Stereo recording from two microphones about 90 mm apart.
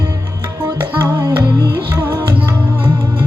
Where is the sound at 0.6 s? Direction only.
40° right (ahead or behind).